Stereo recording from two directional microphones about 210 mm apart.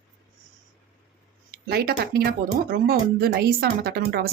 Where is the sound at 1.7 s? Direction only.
50° right (ahead or behind).